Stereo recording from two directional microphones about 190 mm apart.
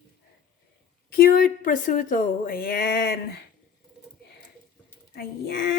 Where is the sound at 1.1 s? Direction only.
50° left (ahead or behind).